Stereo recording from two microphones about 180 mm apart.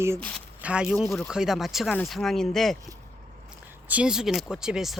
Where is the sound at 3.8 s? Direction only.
5° right (ahead or behind).